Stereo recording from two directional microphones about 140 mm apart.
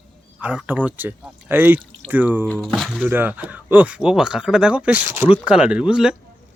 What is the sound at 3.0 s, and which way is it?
Speech, 15° right (ahead or behind).